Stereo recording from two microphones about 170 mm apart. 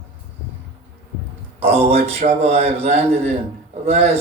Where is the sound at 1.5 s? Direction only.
35° right (ahead or behind).